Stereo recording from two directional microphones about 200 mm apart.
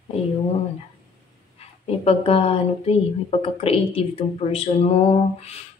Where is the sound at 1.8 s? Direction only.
30° left (ahead or behind).